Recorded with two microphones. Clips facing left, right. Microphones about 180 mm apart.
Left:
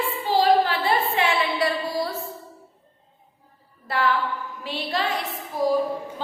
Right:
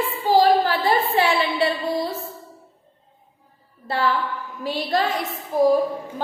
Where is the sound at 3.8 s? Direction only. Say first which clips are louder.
Right 1 dB; 30° right (ahead or behind).